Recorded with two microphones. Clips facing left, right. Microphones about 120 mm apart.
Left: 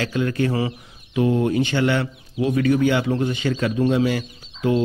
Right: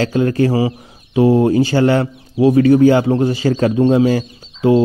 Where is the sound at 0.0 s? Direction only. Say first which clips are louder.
Right 7 dB; 35° right (ahead or behind).